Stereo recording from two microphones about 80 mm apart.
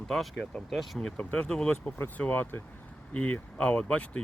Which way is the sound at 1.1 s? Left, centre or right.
Centre.